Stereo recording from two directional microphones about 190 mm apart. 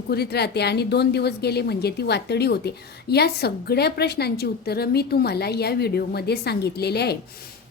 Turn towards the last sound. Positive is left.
turn(degrees=60)  # may be behind; listen again after turning